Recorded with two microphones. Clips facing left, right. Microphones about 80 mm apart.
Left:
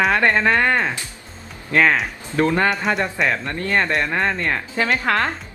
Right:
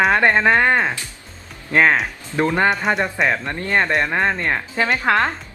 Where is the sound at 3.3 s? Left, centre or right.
Centre.